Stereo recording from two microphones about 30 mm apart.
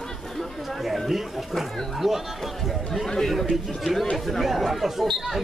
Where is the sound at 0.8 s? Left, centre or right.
Centre.